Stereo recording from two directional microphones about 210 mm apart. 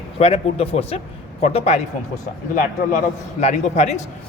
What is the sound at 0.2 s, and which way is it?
A man's voice, 30° left (ahead or behind).